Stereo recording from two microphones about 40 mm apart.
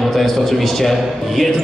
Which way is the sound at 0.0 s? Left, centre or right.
Centre.